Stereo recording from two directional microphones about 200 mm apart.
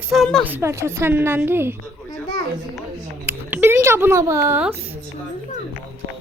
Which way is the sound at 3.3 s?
10° right (ahead or behind).